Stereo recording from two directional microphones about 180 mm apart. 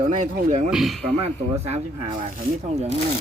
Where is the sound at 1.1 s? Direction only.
35° right (ahead or behind).